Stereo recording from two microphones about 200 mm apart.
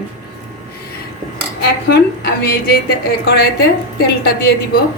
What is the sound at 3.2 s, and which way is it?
Speech, 55° left (ahead or behind).